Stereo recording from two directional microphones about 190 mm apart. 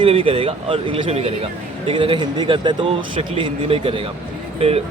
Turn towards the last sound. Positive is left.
turn(degrees=-30)  # may be behind; listen again after turning